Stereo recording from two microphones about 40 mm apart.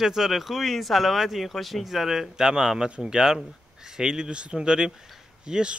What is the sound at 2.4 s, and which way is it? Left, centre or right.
Speech, centre.